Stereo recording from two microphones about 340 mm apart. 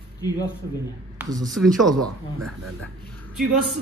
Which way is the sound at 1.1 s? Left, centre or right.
Centre.